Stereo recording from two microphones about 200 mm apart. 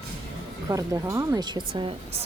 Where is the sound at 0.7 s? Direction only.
15° right (ahead or behind).